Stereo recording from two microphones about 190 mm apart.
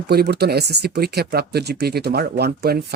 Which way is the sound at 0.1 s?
55° right (ahead or behind).